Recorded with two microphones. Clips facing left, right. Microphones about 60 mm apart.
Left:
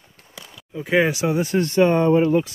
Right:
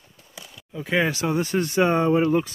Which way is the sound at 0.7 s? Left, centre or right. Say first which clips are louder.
Left 4 dB; centre.